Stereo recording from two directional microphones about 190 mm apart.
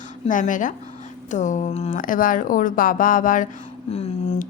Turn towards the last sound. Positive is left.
turn(degrees=35)  # may be behind; listen again after turning